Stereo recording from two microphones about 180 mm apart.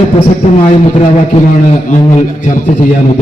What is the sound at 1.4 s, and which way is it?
A man's voice, 40° left (ahead or behind).